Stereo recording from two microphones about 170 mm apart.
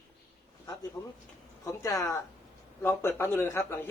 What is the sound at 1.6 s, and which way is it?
Speech, 20° left (ahead or behind).